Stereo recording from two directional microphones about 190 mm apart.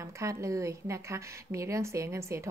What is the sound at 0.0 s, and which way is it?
A woman's voice, 15° right (ahead or behind).